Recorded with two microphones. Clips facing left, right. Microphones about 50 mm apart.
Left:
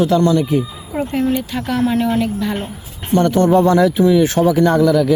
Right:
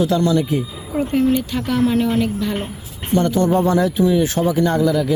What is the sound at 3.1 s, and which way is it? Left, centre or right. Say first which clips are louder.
Speech: left 4 dB; left.